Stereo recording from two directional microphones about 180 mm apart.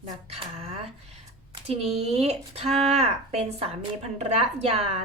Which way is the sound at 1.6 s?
35° right (ahead or behind).